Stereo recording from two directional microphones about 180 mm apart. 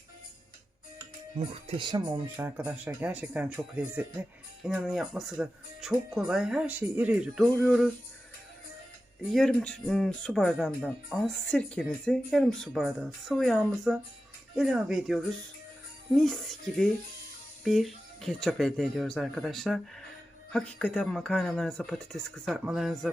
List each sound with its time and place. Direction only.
1.4 s speech: 30° right (ahead or behind)
2.2 s speech: 10° right (ahead or behind)
9.3 s speech: 5° left (ahead or behind)